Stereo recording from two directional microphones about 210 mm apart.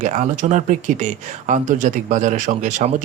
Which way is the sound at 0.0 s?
35° right (ahead or behind).